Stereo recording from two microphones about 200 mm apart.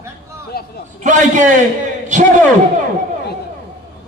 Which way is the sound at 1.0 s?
40° right (ahead or behind).